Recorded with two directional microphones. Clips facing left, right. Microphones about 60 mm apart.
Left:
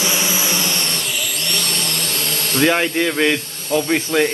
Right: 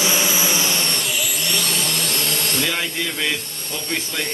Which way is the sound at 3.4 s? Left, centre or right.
Centre.